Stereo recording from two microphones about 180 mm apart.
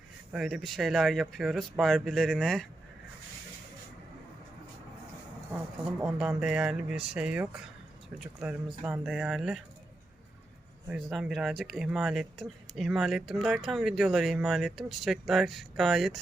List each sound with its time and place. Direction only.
0.3 s speech: centre (ahead or behind)
6.0 s speech: 10° right (ahead or behind)
10.8 s speech: 5° right (ahead or behind)